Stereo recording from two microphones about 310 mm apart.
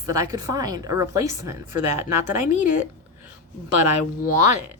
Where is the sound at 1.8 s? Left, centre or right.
Right.